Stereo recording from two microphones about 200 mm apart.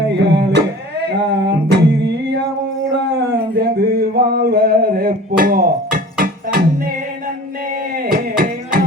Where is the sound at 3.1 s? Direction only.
55° right (ahead or behind).